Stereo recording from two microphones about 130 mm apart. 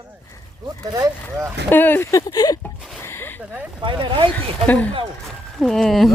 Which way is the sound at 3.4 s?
10° right (ahead or behind).